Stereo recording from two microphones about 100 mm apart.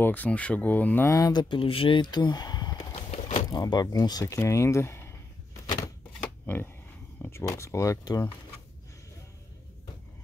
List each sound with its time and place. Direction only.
0.0 s speech: 15° left (ahead or behind)
1.1 s speech: 40° left (ahead or behind)
2.9 s walk: 75° left (ahead or behind)
3.4 s speech: 40° left (ahead or behind)
4.4 s a sound: 30° left (ahead or behind)
6.4 s speech: 20° left (ahead or behind); by 8.3 s 35° left (ahead or behind)